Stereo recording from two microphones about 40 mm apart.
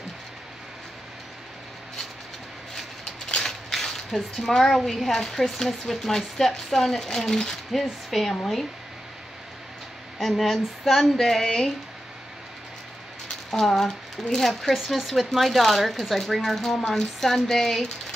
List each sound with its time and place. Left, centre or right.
3.3 s mechanisms: centre
3.7 s speech: centre
7.7 s speech: centre
10.1 s speech: centre
13.5 s speech: centre